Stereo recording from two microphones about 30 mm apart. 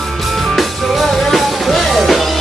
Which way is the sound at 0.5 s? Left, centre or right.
Centre.